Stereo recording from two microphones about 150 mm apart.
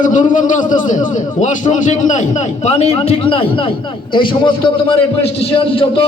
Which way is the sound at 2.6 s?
45° left (ahead or behind).